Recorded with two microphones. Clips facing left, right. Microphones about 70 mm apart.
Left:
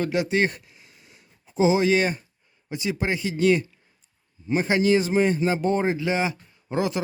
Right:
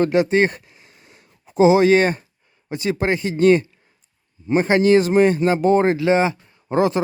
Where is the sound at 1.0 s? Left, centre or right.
Right.